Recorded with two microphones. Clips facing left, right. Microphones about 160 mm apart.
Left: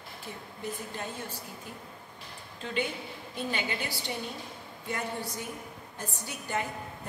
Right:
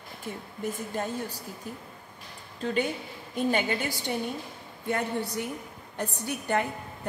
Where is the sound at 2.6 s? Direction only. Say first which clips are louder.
Right 5 dB; 45° right (ahead or behind).